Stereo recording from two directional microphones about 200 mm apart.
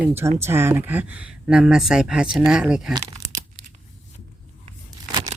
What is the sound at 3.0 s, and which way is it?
Crumpling, 20° right (ahead or behind).